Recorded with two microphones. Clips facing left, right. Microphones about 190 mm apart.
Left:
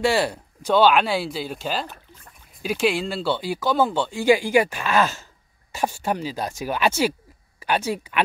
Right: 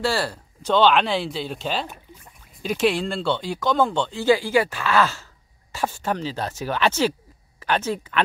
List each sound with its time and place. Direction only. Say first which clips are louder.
0.0 s speech: left 3 dB; 20° left (ahead or behind)
5.7 s a sound: left 1 dB; 15° left (ahead or behind)
6.0 s speech: even; 10° left (ahead or behind)